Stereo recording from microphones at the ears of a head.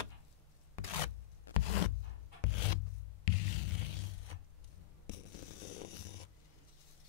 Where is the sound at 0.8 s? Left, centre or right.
Left.